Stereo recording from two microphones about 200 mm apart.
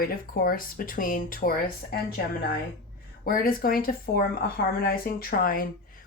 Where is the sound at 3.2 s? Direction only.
45° left (ahead or behind).